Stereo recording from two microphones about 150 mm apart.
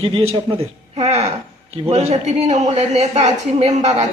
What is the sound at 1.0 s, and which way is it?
Speech, 50° right (ahead or behind).